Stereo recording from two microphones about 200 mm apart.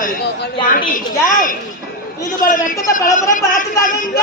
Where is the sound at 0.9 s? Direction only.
40° left (ahead or behind).